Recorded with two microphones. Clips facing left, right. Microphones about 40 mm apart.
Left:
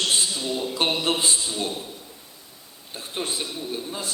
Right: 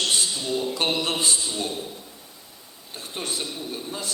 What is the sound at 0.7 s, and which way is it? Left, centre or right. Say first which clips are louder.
A man's voice: left 1 dB; centre.